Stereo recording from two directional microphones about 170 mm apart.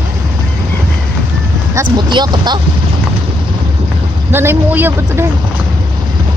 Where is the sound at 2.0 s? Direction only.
25° right (ahead or behind).